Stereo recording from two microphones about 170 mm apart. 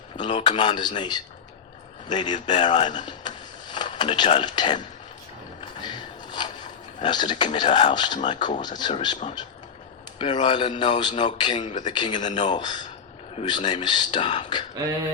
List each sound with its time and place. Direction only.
0.2 s speech: 30° left (ahead or behind)
5.5 s a sound: 25° left (ahead or behind)
8.6 s speech: 25° left (ahead or behind)
10.2 s speech: 30° left (ahead or behind)
12.2 s speech: 45° left (ahead or behind)
12.5 s speech: 25° left (ahead or behind)